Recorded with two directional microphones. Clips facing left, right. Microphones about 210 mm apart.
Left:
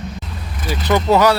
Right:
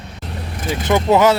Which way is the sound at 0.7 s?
20° right (ahead or behind).